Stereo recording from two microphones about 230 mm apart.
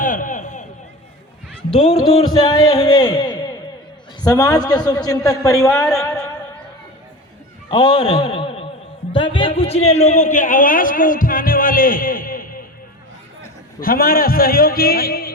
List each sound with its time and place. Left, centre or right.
0.0 s a sound: left
1.7 s a man's voice: left; by 5.9 s centre
7.7 s a man's voice: left
13.7 s a man's voice: left